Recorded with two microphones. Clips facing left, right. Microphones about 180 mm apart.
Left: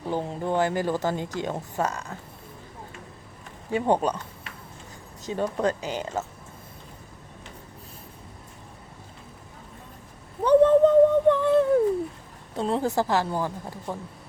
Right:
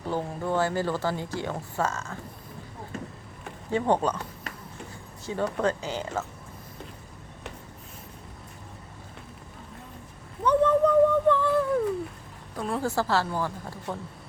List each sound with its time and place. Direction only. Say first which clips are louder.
0.1 s a woman's voice: left 1 dB; 20° left (ahead or behind)
3.7 s a woman's voice: left 1 dB; 15° left (ahead or behind)
5.2 s a woman's voice: left 1 dB; 15° left (ahead or behind)
10.4 s a sound: left 5 dB; 30° left (ahead or behind)
11.3 s a sound: left 4 dB; 20° left (ahead or behind)
12.5 s a woman's voice: left 3 dB; 25° left (ahead or behind)